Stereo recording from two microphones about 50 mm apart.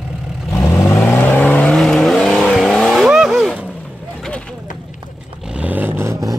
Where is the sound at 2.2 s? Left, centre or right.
Centre.